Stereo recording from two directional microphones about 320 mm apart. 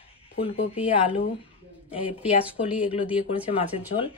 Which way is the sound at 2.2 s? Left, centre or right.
Centre.